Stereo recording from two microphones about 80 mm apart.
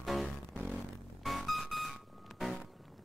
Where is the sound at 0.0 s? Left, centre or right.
Centre.